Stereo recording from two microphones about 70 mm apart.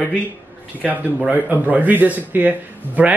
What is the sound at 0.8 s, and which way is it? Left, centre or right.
Speech, centre.